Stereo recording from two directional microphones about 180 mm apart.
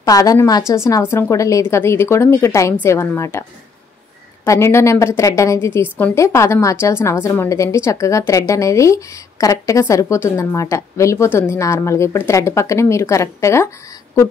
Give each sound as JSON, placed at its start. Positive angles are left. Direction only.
{"t": 0.0, "sound": "a woman's voice", "side_deg": 20}
{"t": 4.5, "sound": "a woman's voice", "side_deg": 15}